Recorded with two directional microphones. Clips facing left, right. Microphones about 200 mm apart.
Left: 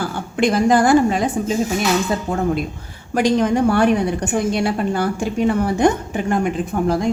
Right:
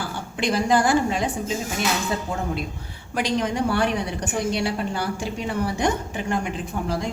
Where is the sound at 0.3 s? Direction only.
50° left (ahead or behind).